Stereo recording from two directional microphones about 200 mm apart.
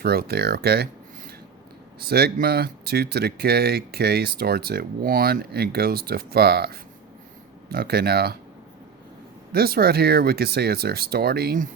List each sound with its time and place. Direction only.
0.0 s speech: 50° right (ahead or behind)
2.0 s speech: 50° right (ahead or behind)
9.5 s speech: 50° right (ahead or behind)